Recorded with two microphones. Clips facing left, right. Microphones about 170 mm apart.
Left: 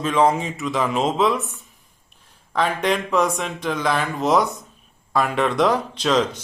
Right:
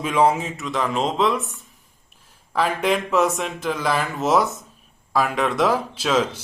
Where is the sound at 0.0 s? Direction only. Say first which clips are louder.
Even; 10° right (ahead or behind).